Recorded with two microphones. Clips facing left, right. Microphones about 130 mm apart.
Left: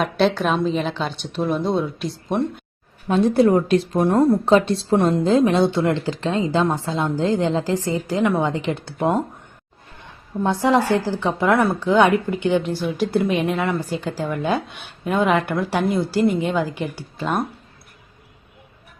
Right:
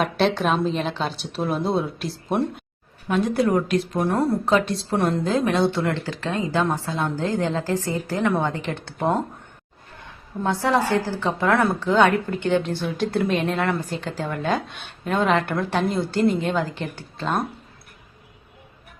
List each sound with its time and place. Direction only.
0.0 s speech: centre (ahead or behind)
3.1 s speech: 30° left (ahead or behind); by 9.2 s 10° left (ahead or behind)
10.4 s a woman's voice: 15° left (ahead or behind)